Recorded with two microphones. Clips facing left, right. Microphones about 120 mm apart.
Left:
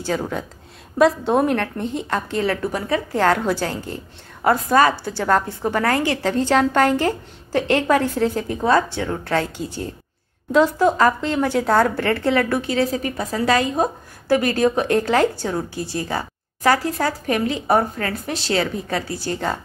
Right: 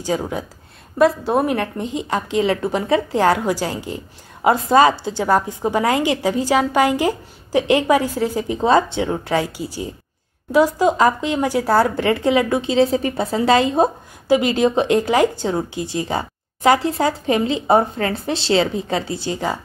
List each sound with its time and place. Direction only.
0.0 s a woman's voice: 10° right (ahead or behind)
8.5 s a woman's voice: 20° right (ahead or behind)
14.2 s a woman's voice: 15° right (ahead or behind)